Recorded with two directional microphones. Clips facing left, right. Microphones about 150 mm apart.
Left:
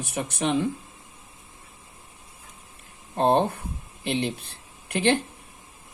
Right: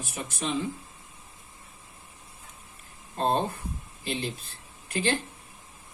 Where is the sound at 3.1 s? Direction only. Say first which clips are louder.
Left 6 dB; 65° left (ahead or behind).